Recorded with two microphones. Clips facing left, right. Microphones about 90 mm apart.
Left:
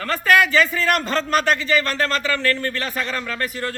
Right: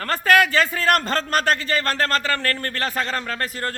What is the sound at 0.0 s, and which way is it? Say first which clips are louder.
A man's voice: even; 45° right (ahead or behind).